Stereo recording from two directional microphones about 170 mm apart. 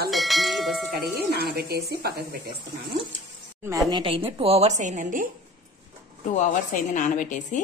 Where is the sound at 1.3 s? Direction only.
70° right (ahead or behind).